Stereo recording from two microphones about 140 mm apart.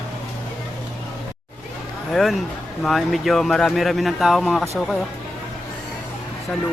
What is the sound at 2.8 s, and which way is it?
Speech, centre (ahead or behind).